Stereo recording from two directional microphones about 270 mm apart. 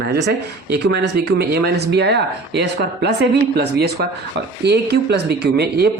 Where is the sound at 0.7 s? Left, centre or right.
Right.